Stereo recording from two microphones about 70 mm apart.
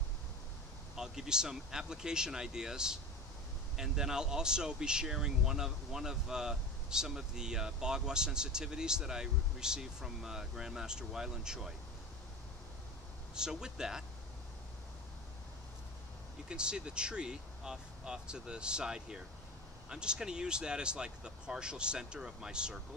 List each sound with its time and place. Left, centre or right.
0.9 s speech: centre
13.3 s speech: centre
16.4 s speech: centre